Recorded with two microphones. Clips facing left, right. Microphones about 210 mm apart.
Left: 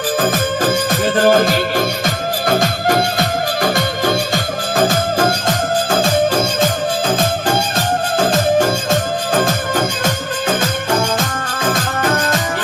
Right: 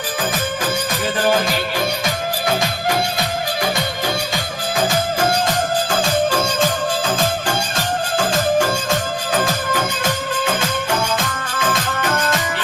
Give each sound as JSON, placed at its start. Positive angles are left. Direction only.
{"t": 0.2, "sound": "music", "side_deg": 50}
{"t": 8.2, "sound": "music", "side_deg": 45}